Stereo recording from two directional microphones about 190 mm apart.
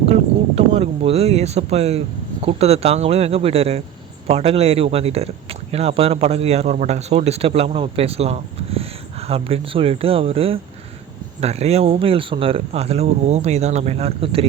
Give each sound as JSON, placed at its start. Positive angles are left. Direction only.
{"t": 0.0, "sound": "speech", "side_deg": -30}